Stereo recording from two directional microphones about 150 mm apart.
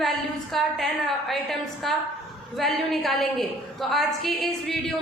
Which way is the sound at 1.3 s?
Centre (ahead or behind).